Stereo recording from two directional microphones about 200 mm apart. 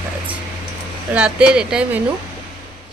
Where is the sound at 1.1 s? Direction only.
5° right (ahead or behind).